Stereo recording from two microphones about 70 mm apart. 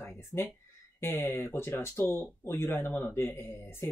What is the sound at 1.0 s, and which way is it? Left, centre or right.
Speech, left.